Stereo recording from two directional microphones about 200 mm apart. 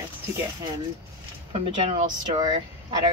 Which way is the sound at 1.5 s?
25° right (ahead or behind).